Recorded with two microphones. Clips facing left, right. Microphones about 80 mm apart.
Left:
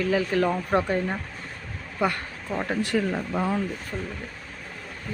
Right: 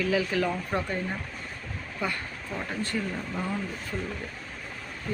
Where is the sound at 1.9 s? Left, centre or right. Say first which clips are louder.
Left 7 dB; left.